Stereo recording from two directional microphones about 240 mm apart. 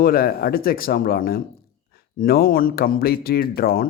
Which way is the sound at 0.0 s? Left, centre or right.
Left.